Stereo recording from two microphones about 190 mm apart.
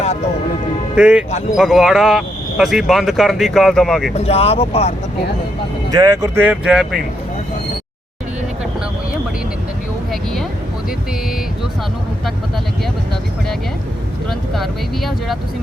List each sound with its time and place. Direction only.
0.9 s speech: 5° right (ahead or behind)
4.2 s speech: 35° left (ahead or behind)
5.9 s speech: 20° right (ahead or behind); by 7.0 s centre (ahead or behind)
14.3 s vehicle: centre (ahead or behind)